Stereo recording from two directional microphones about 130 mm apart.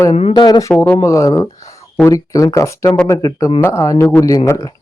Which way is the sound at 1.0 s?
25° left (ahead or behind).